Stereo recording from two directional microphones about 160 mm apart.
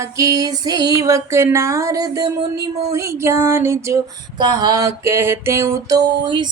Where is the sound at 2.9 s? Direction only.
20° right (ahead or behind).